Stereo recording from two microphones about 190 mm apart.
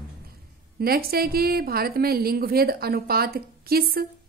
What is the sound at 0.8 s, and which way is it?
A woman's voice, 55° right (ahead or behind).